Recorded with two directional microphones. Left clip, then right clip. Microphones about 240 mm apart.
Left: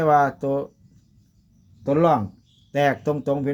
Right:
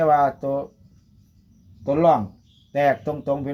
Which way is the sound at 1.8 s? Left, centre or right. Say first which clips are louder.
Right 1 dB; left.